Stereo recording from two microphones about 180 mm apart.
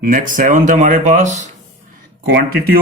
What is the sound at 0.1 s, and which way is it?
Speech, 50° right (ahead or behind).